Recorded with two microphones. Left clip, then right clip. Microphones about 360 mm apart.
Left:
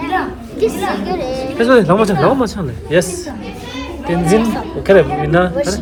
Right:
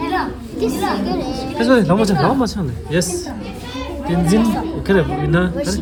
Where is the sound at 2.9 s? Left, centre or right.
Centre.